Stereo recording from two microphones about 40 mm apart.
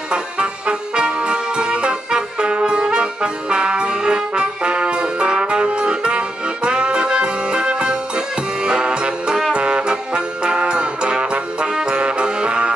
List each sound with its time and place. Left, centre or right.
0.1 s music: right